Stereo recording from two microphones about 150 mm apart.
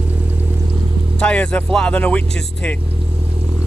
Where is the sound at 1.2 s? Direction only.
5° left (ahead or behind).